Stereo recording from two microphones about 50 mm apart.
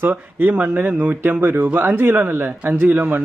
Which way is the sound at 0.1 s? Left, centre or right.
Right.